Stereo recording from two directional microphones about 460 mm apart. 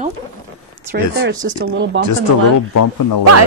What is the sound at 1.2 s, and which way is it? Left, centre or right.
Speech, right.